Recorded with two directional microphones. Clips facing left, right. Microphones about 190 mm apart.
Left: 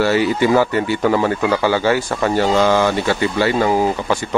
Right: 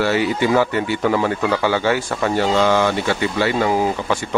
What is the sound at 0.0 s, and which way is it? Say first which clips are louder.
Speech: left 3 dB; 40° left (ahead or behind).